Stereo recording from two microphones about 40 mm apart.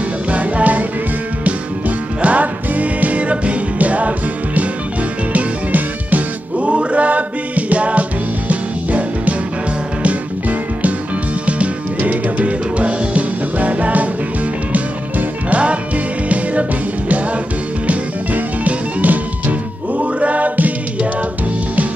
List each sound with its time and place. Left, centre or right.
0.3 s music: right
2.2 s music: right
5.3 s music: right
6.7 s music: right
11.4 s music: right
17.8 s music: right